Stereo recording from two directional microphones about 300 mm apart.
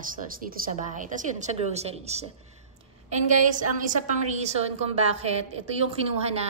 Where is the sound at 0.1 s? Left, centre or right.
Right.